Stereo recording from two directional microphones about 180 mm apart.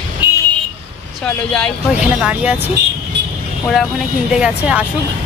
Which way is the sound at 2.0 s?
5° right (ahead or behind).